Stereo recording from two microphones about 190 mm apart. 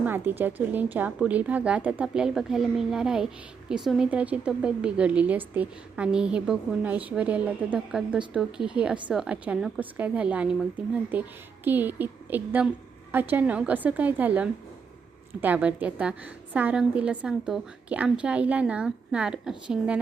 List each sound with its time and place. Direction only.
0.0 s a woman's voice: 10° right (ahead or behind)